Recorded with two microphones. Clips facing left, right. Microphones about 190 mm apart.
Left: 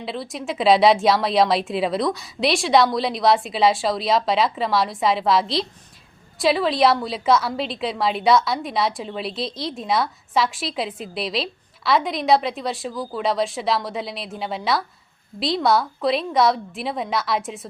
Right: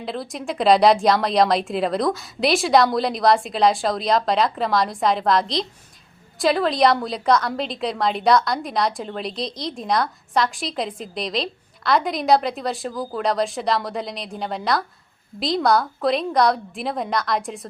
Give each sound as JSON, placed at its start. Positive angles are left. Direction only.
{"t": 0.0, "sound": "a woman's voice", "side_deg": 0}